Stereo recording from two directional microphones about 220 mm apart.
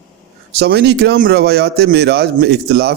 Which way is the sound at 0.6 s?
50° right (ahead or behind).